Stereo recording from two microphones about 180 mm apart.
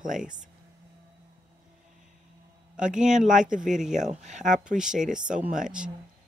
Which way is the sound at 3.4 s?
5° right (ahead or behind).